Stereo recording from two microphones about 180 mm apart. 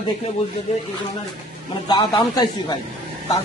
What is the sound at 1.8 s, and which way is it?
Speech, 25° left (ahead or behind).